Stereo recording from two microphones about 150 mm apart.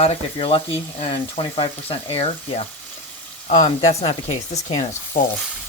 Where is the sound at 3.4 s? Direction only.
55° left (ahead or behind).